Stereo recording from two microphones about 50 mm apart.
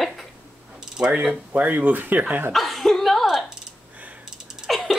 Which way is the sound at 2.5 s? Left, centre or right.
Centre.